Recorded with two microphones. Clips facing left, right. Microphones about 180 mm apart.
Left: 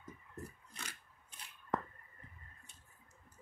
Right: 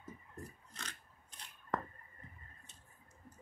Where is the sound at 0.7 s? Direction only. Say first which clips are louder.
Right 1 dB; 10° left (ahead or behind).